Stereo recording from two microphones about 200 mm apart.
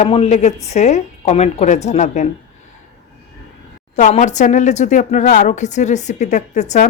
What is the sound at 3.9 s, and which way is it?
Speech, 35° left (ahead or behind).